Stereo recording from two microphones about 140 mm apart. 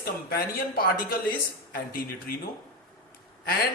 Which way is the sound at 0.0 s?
90° left.